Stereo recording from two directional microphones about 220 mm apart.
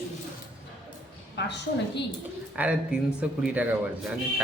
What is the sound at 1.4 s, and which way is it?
Speech, 50° left (ahead or behind).